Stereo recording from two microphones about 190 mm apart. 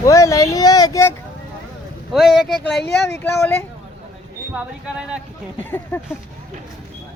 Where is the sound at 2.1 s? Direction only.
Centre (ahead or behind).